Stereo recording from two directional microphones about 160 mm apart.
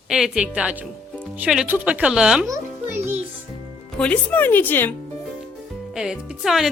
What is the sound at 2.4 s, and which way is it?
Music, 15° right (ahead or behind).